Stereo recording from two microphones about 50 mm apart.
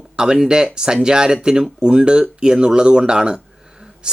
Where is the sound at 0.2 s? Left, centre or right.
Centre.